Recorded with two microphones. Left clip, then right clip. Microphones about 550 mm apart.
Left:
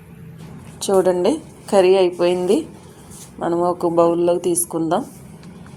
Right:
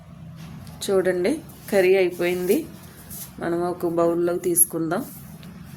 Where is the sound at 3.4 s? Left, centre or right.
Right.